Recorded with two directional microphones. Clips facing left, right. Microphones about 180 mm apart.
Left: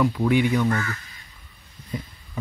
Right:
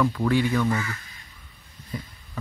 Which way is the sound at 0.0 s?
15° left (ahead or behind).